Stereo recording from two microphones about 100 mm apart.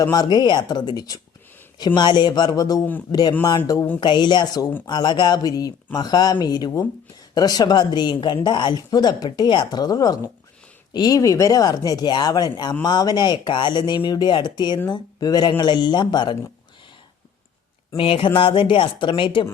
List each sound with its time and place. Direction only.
0.0 s a woman's voice: 40° left (ahead or behind)
17.9 s speech: 65° left (ahead or behind)